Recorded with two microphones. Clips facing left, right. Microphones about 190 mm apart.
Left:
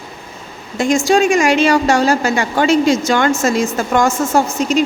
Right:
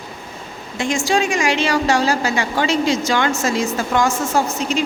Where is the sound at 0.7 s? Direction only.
45° left (ahead or behind).